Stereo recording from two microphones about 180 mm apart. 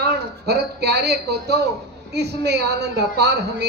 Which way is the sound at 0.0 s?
65° right (ahead or behind).